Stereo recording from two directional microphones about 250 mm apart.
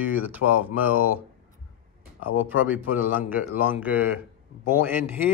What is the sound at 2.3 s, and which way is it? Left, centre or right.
A man's voice, centre.